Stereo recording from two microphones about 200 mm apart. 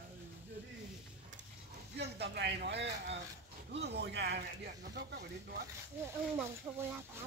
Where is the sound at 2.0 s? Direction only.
55° right (ahead or behind).